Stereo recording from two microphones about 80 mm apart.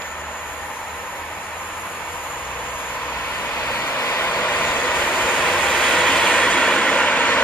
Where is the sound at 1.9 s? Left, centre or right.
Left.